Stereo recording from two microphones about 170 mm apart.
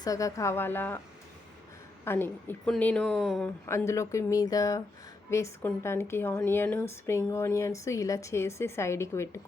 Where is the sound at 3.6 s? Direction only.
15° left (ahead or behind).